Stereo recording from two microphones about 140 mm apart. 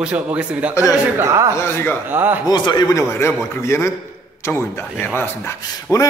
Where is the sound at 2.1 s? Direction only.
15° right (ahead or behind).